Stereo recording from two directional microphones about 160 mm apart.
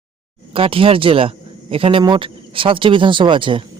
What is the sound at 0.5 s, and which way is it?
Speech, 35° right (ahead or behind).